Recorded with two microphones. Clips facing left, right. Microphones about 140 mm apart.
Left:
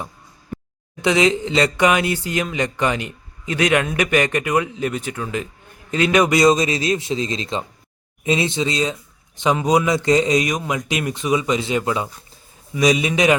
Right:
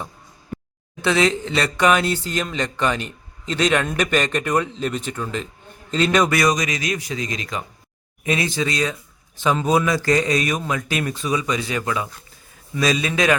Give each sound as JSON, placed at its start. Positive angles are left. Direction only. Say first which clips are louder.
{"t": 1.0, "sound": "a man's voice", "louder": "left 2 dB", "side_deg": 15}